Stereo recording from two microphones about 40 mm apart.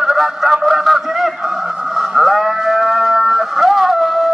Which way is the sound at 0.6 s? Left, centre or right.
Centre.